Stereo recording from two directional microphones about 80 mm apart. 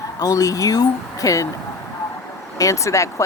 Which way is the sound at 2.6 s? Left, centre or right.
Left.